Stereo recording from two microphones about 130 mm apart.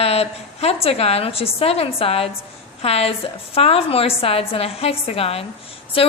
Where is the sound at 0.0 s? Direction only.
50° left (ahead or behind).